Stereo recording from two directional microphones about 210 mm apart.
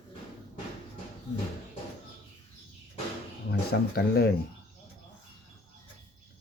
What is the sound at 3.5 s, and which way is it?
Speech, 50° left (ahead or behind).